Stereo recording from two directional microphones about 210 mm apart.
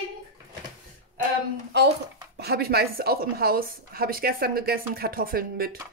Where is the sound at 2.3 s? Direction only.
50° right (ahead or behind).